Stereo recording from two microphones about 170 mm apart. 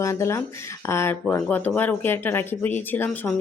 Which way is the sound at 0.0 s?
15° left (ahead or behind).